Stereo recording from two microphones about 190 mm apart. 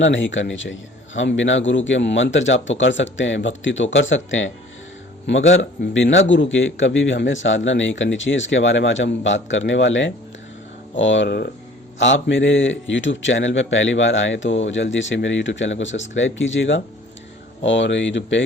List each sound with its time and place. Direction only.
0.0 s a man's voice: 80° left; by 11.5 s 55° left (ahead or behind)
11.9 s a man's voice: 80° left